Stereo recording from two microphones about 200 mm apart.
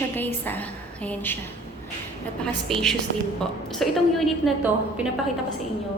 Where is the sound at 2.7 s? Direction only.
Centre (ahead or behind).